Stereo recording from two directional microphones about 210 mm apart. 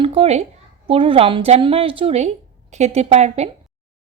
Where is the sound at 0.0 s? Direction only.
30° right (ahead or behind).